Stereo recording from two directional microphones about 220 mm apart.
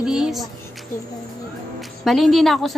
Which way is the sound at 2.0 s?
Centre (ahead or behind).